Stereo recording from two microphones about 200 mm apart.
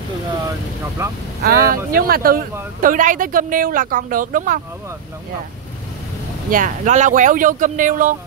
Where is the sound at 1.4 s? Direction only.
45° right (ahead or behind).